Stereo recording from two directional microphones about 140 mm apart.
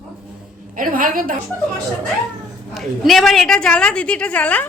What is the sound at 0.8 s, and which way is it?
Speech, 80° right.